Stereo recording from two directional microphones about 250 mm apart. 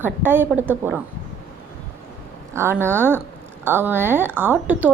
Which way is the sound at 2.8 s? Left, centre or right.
Centre.